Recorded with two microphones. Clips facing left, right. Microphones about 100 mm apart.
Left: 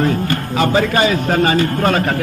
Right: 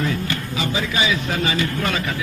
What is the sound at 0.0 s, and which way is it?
A man's voice, 45° left (ahead or behind).